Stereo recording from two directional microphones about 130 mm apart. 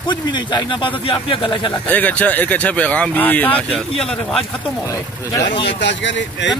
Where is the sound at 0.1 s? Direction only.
35° left (ahead or behind).